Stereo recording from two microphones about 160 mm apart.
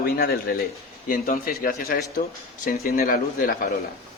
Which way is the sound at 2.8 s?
70° left (ahead or behind).